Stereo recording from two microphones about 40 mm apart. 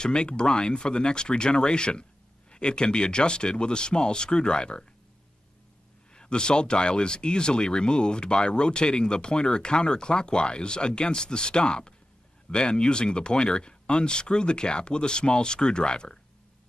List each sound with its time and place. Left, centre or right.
0.0 s speech: left
6.1 s speech: left